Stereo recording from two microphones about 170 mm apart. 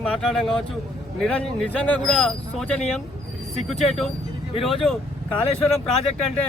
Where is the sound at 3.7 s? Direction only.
40° left (ahead or behind).